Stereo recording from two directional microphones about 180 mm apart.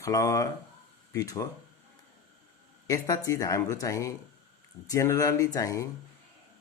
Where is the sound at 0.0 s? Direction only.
20° left (ahead or behind).